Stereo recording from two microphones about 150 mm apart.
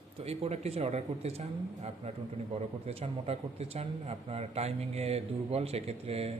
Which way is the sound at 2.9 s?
40° right (ahead or behind).